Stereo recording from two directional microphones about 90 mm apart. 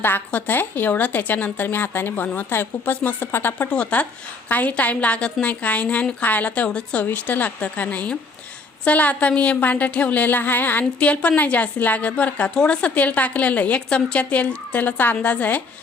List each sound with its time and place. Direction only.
0.0 s speech: 20° left (ahead or behind)
3.7 s a woman's voice: 15° left (ahead or behind)